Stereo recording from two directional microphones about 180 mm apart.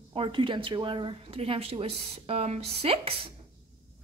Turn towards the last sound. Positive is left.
turn(degrees=-35)  # may be behind; listen again after turning